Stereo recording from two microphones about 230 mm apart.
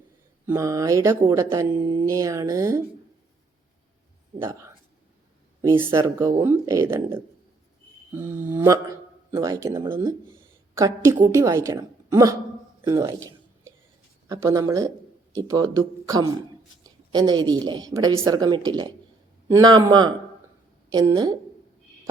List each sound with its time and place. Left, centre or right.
0.4 s speech: centre
4.4 s speech: centre
5.9 s speech: centre
14.3 s a woman's voice: centre